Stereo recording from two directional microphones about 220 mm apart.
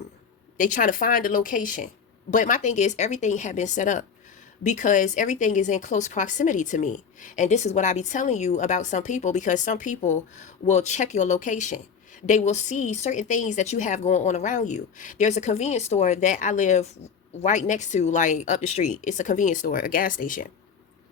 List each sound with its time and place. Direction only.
0.5 s speech: 35° left (ahead or behind)